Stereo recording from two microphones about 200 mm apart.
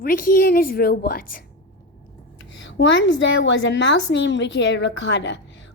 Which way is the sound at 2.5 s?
65° left (ahead or behind).